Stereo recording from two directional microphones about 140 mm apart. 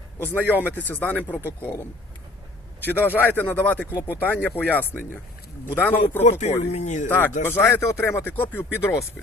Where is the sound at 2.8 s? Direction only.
15° left (ahead or behind).